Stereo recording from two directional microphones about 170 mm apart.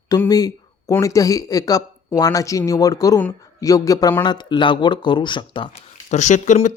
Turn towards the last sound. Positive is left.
turn(degrees=50)  # may be behind; listen again after turning